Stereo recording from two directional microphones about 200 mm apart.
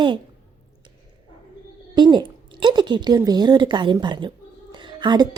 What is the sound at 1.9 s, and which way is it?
A woman's voice, 20° right (ahead or behind).